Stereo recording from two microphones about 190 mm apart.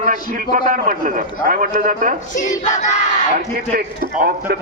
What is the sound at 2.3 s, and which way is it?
Battle cry, 40° left (ahead or behind).